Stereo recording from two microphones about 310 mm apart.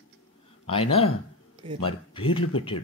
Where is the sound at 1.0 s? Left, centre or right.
Centre.